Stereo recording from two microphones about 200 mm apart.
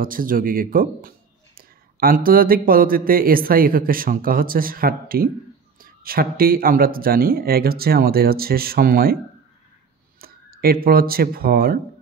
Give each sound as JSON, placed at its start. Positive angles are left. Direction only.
{"t": 0.0, "sound": "a man's voice", "side_deg": -45}
{"t": 10.2, "sound": "speech", "side_deg": -50}